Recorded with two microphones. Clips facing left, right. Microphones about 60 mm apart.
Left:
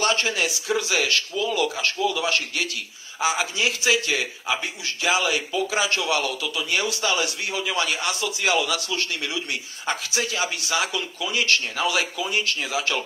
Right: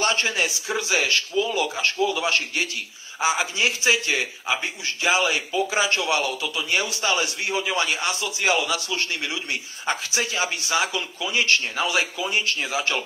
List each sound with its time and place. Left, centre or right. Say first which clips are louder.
0.0 s a man's voice: even; right